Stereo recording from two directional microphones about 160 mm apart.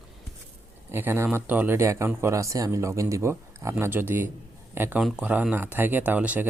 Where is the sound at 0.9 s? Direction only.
15° right (ahead or behind).